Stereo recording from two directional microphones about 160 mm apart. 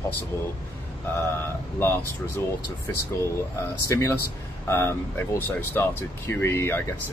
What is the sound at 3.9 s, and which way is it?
Speech, 15° left (ahead or behind).